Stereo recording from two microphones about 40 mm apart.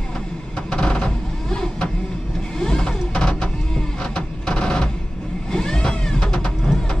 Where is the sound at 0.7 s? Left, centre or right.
Left.